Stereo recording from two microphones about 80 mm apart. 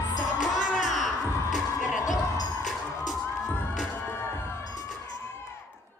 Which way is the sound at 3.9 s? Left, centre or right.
Left.